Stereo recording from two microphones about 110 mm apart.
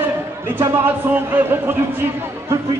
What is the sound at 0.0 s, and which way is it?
Speech, 20° right (ahead or behind).